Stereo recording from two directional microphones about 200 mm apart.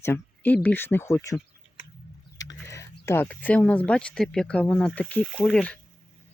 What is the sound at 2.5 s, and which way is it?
Speech, 15° left (ahead or behind).